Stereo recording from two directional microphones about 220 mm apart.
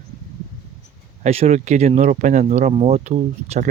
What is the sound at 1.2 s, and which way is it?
Speech, 30° right (ahead or behind).